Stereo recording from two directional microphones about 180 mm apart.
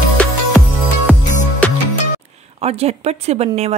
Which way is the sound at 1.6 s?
5° left (ahead or behind).